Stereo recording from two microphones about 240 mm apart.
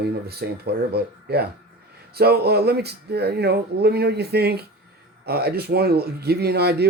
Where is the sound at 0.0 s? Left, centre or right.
Right.